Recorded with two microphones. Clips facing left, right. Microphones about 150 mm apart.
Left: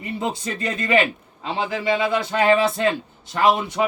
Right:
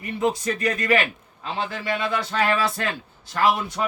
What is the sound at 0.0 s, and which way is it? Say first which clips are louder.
A man's voice: right 3 dB; 25° left (ahead or behind).